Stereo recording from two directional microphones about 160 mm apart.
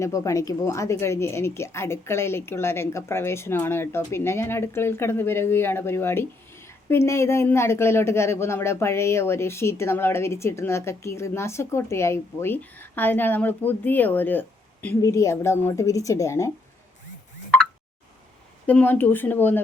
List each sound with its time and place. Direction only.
0.0 s speech: 20° left (ahead or behind)
18.6 s speech: 10° left (ahead or behind)